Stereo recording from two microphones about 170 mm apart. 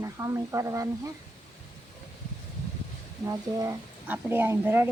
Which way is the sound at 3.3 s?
20° right (ahead or behind).